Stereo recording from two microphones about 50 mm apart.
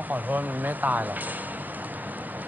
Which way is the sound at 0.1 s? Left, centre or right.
Right.